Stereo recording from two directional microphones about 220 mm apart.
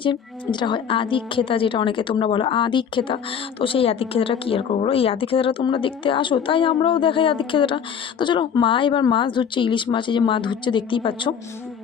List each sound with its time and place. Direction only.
0.0 s a woman's voice: 20° left (ahead or behind)